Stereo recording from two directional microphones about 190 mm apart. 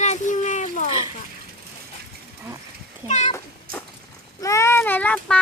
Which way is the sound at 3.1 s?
40° left (ahead or behind).